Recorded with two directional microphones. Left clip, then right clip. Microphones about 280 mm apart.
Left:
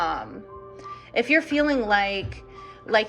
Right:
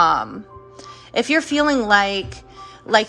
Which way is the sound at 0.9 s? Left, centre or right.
Centre.